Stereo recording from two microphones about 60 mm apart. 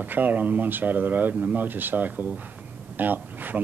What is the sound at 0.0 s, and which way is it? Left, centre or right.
Speech, right.